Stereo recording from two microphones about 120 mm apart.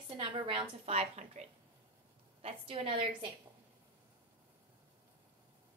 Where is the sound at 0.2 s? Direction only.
50° right (ahead or behind).